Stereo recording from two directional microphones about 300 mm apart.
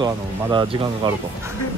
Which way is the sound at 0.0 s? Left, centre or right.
Centre.